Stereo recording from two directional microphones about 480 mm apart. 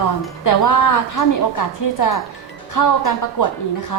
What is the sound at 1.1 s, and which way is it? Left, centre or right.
A woman's voice, left.